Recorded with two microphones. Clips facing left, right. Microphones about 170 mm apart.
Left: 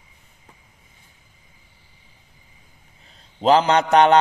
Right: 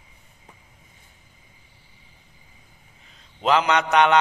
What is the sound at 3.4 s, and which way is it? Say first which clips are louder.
Speech: left 4 dB; 35° left (ahead or behind).